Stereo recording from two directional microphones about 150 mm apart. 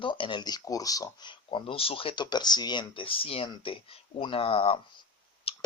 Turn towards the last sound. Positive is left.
turn(degrees=40)  # may be behind; listen again after turning